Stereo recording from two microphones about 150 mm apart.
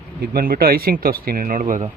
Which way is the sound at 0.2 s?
75° right (ahead or behind).